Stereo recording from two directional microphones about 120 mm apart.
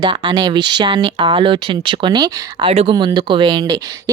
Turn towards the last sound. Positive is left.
turn(degrees=-40)  # may be behind; listen again after turning